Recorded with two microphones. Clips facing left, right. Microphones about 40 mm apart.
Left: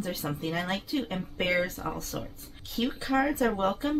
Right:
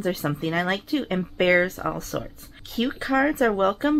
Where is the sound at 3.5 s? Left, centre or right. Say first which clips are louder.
Right 6 dB; centre.